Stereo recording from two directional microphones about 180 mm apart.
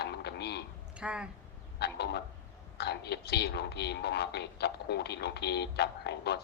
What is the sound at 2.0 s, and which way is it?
A woman's voice, 65° left (ahead or behind).